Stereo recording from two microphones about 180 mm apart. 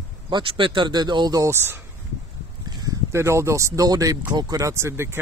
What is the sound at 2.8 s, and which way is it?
Speech, 15° right (ahead or behind).